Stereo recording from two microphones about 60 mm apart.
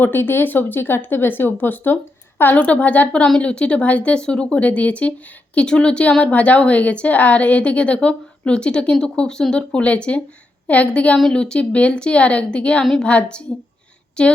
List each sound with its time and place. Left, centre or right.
0.0 s a woman's voice: left; by 12.8 s centre
12.8 s a woman's voice: centre
13.1 s a woman's voice: centre